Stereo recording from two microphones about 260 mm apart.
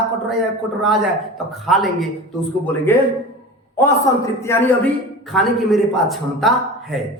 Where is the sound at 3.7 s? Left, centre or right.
Centre.